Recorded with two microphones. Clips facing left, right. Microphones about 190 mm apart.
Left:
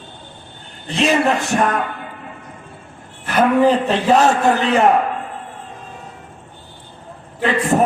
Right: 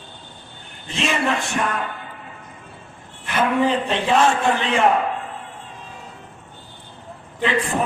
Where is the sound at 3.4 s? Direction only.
40° left (ahead or behind).